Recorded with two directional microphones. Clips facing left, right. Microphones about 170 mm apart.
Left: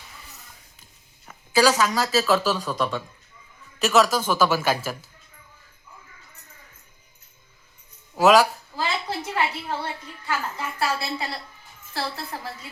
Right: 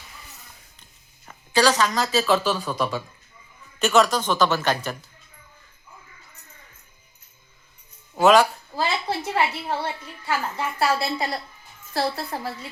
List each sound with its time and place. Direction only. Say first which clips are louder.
1.3 s speech: left 1 dB; 5° left (ahead or behind)
8.1 s speech: even; centre (ahead or behind)
8.8 s a sound: right 2 dB; 35° right (ahead or behind)
10.8 s a woman's voice: right 4 dB; 40° right (ahead or behind)